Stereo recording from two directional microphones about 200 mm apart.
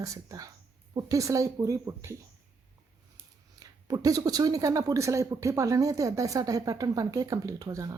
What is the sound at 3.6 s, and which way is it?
Speech, 20° right (ahead or behind).